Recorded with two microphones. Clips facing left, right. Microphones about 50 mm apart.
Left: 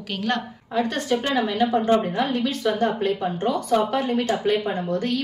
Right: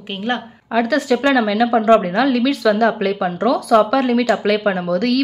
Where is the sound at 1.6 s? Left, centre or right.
Right.